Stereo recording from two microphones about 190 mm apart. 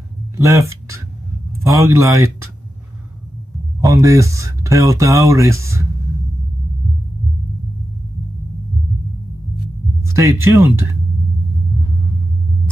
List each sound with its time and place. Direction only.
0.4 s speech: 15° right (ahead or behind)
3.8 s speech: 15° right (ahead or behind)
10.1 s speech: 15° right (ahead or behind)